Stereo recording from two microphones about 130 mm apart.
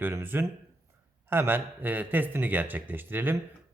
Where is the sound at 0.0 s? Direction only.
15° right (ahead or behind).